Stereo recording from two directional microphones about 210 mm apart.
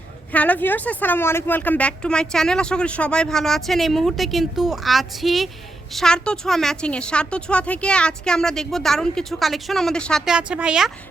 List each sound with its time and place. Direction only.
0.3 s a woman's voice: 5° left (ahead or behind)